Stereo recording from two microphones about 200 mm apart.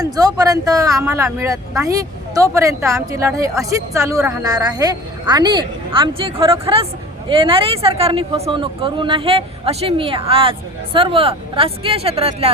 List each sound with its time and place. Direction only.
0.0 s speech: 20° right (ahead or behind)